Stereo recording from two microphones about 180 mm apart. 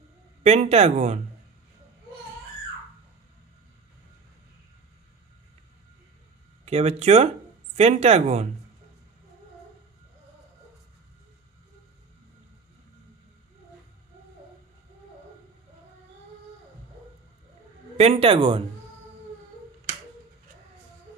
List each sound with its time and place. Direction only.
0.4 s speech: 35° right (ahead or behind)
6.6 s speech: 35° right (ahead or behind)
17.9 s speech: 35° right (ahead or behind)